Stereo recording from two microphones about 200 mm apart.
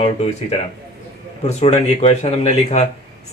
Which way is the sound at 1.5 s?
35° left (ahead or behind).